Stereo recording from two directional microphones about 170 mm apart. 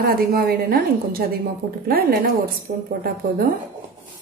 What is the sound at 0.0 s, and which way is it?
A woman's voice, 65° right (ahead or behind).